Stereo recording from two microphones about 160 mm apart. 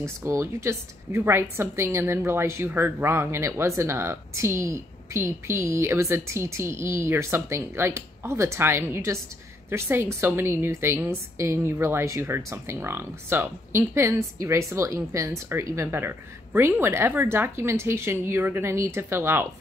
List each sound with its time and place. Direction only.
0.0 s a woman's voice: 15° right (ahead or behind)